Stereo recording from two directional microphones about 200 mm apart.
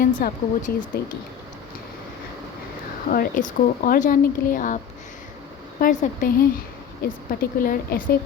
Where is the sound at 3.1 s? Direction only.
45° left (ahead or behind).